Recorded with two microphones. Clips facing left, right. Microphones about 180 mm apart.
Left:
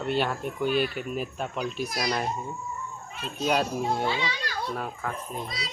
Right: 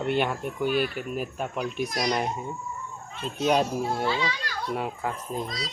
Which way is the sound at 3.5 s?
15° right (ahead or behind).